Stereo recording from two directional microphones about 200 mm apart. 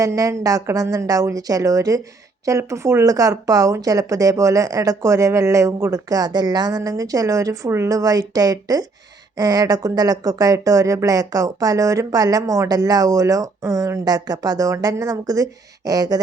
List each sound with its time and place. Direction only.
0.0 s speech: 15° right (ahead or behind)